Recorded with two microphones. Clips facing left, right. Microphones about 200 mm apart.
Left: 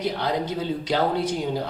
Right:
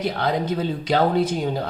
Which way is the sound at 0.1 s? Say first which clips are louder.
Right 3 dB; 55° right (ahead or behind).